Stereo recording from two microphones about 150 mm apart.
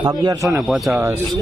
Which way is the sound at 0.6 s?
Centre (ahead or behind).